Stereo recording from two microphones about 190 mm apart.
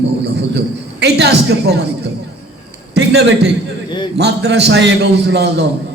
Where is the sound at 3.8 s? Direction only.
25° left (ahead or behind).